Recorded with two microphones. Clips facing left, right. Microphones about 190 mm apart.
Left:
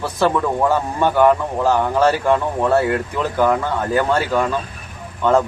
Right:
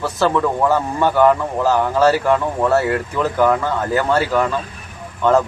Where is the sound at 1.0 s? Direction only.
15° left (ahead or behind).